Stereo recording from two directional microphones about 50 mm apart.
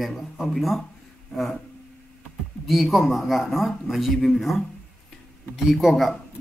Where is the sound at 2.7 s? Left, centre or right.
Centre.